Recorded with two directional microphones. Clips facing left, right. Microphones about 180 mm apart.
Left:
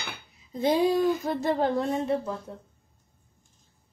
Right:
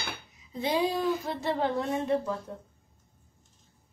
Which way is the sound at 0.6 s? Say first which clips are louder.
Left 5 dB; 50° left (ahead or behind).